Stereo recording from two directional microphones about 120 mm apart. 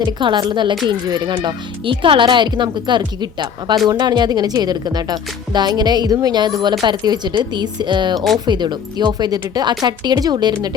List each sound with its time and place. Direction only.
0.0 s speech: 40° right (ahead or behind)